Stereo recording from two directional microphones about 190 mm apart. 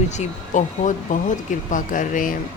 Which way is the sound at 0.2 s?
40° left (ahead or behind).